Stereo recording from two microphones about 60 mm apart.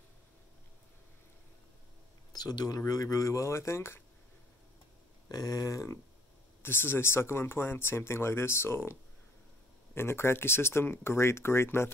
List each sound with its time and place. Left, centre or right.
2.3 s speech: left
2.9 s speech: left
5.3 s speech: left
6.6 s speech: left
9.9 s speech: left